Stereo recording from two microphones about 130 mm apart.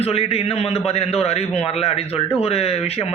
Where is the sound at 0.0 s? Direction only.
50° left (ahead or behind).